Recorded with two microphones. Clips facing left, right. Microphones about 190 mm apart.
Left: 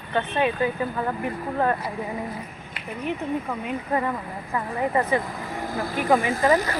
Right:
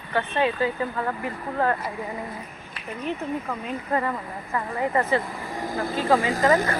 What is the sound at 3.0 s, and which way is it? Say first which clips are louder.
Speech: left 1 dB; 10° left (ahead or behind).